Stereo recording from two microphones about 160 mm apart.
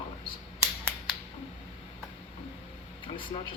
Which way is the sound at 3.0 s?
30° left (ahead or behind).